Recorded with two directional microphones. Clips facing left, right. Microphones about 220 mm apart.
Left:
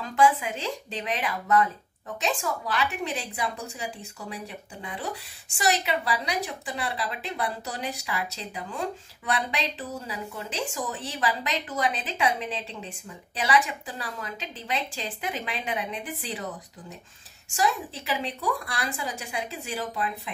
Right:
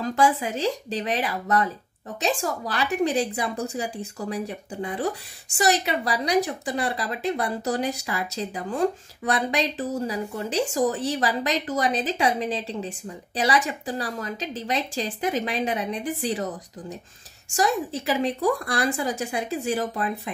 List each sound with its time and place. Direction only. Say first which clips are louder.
0.0 s a woman's voice: right 1 dB; 40° right (ahead or behind)
17.6 s a woman's voice: right 4 dB; 45° right (ahead or behind)